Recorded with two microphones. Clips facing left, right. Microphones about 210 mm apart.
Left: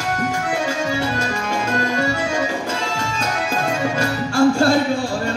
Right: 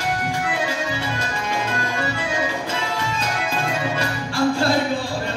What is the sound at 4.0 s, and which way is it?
Music, 45° left (ahead or behind).